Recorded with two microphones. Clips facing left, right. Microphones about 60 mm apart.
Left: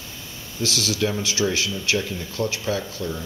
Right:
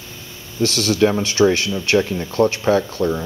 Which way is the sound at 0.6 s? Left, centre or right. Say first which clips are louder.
Right 8 dB; right.